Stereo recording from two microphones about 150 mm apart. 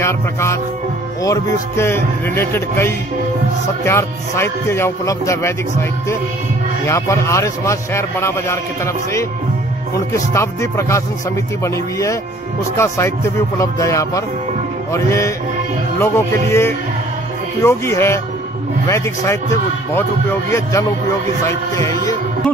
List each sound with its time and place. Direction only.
0.0 s a man's voice: 20° left (ahead or behind)